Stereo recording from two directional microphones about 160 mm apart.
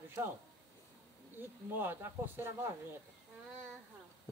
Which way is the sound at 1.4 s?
15° right (ahead or behind).